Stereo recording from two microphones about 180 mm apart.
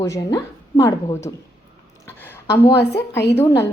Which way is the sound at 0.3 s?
20° left (ahead or behind).